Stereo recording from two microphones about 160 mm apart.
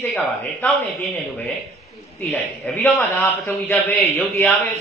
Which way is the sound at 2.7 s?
15° left (ahead or behind).